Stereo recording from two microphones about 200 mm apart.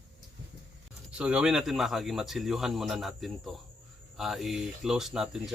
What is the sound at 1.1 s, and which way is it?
Speech, 5° right (ahead or behind).